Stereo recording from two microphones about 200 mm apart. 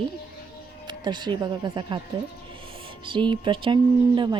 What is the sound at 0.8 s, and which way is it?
Speech, 20° right (ahead or behind).